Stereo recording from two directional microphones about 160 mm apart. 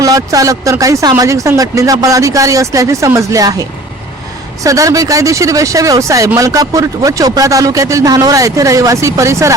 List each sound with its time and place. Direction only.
0.0 s speech: 20° right (ahead or behind)
4.6 s speech: 20° right (ahead or behind)